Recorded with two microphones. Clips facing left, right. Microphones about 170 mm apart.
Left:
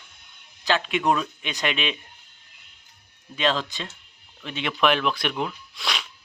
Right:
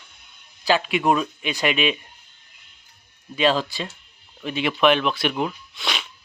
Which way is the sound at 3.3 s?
10° right (ahead or behind).